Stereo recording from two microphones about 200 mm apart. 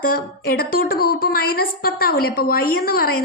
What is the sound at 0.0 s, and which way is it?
A woman's voice, 50° left (ahead or behind).